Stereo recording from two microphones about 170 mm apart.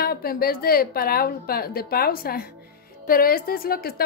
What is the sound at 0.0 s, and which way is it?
A woman's voice, 65° left (ahead or behind).